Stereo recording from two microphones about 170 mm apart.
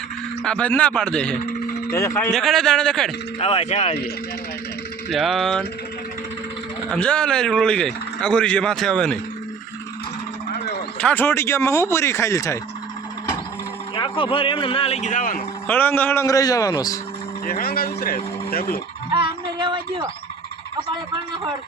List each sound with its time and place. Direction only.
0.4 s speech: 5° left (ahead or behind)
1.9 s speech: 15° left (ahead or behind)
2.3 s speech: centre (ahead or behind)
3.4 s a man's voice: 35° left (ahead or behind)
5.1 s speech: centre (ahead or behind)
6.9 s speech: 5° left (ahead or behind)
10.5 s a sound: 70° left (ahead or behind)
11.0 s speech: 10° left (ahead or behind)
13.9 s a man's voice: 30° left (ahead or behind); by 15.4 s 50° left (ahead or behind)
15.6 s speech: 10° left (ahead or behind)
17.4 s speech: 60° left (ahead or behind)
19.1 s a sound: 30° right (ahead or behind)